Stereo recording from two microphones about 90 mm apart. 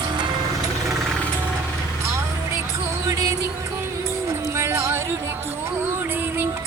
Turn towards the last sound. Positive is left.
turn(degrees=-30)  # may be behind; listen again after turning